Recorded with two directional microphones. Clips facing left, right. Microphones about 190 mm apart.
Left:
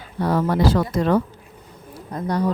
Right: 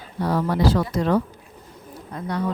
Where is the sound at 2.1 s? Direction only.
40° left (ahead or behind).